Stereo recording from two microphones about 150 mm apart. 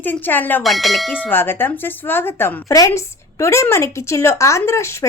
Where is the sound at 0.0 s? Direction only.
15° left (ahead or behind).